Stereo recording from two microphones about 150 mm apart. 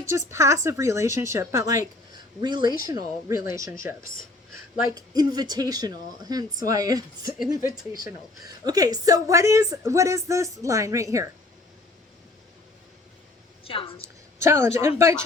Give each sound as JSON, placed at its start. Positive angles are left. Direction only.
{"t": 0.0, "sound": "speech", "side_deg": -20}
{"t": 4.9, "sound": "speech", "side_deg": -25}
{"t": 13.7, "sound": "a woman's voice", "side_deg": 35}
{"t": 14.0, "sound": "a woman's voice", "side_deg": -20}